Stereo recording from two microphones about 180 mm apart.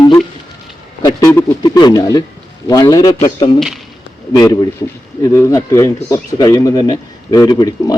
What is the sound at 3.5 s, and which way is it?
Speech, centre (ahead or behind).